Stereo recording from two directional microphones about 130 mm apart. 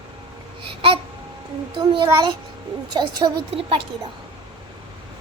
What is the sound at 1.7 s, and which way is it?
Speech, 40° right (ahead or behind).